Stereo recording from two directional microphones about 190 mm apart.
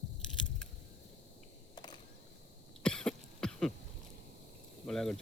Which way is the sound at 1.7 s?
20° left (ahead or behind).